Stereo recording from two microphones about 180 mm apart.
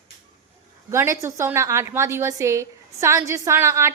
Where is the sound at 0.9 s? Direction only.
15° right (ahead or behind).